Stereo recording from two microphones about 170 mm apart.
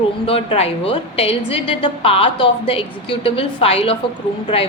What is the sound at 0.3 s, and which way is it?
A woman's voice, 35° left (ahead or behind).